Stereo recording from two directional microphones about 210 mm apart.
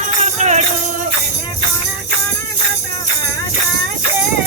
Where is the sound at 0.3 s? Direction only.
35° right (ahead or behind).